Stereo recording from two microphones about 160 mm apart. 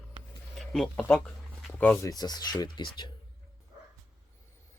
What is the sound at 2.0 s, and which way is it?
Speech, 25° left (ahead or behind).